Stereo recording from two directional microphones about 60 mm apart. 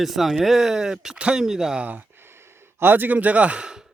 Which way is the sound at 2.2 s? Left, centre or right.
Right.